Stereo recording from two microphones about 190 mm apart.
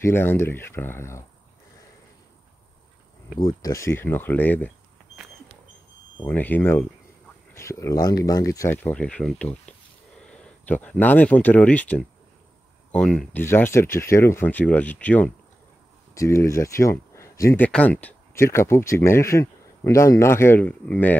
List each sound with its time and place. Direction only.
0.0 s speech: 10° left (ahead or behind)
3.3 s speech: 20° left (ahead or behind)
6.2 s speech: 10° left (ahead or behind)